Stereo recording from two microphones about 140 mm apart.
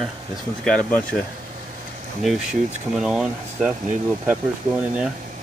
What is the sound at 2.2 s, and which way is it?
Speech, centre (ahead or behind).